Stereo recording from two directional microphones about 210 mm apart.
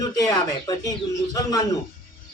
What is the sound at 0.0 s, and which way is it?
Speech, 20° left (ahead or behind).